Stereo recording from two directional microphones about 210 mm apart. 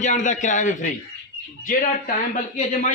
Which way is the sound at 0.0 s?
35° left (ahead or behind).